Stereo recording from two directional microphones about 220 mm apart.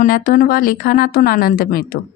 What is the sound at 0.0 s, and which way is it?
Speech, 40° left (ahead or behind).